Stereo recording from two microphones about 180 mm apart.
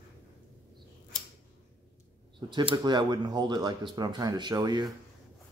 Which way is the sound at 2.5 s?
25° right (ahead or behind).